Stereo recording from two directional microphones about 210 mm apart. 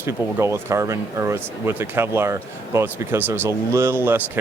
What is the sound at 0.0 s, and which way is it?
Speech, 10° right (ahead or behind).